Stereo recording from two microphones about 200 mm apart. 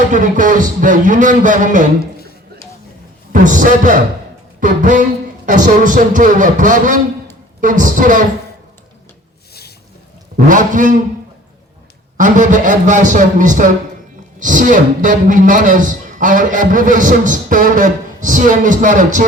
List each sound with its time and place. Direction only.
0.1 s a man's voice: 40° right (ahead or behind)
3.3 s a man's voice: 40° right (ahead or behind)
10.3 s a man's voice: 40° right (ahead or behind)
12.1 s a man's voice: 40° right (ahead or behind)